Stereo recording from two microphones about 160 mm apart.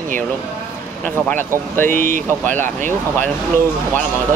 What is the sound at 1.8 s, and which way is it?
Speech, 55° right (ahead or behind).